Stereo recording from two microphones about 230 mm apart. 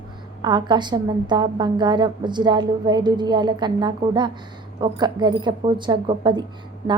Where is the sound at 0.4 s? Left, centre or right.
Centre.